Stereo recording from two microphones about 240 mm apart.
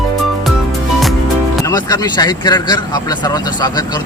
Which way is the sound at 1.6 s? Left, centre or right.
Centre.